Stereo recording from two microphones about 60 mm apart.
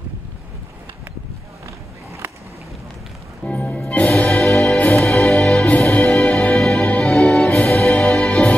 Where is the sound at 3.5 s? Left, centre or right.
Left.